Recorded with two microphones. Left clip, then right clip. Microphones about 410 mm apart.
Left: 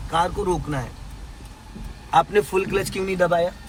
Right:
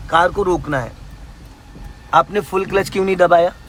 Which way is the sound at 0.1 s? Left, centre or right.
Centre.